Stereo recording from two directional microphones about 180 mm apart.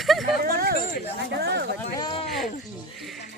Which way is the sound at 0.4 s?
60° right (ahead or behind).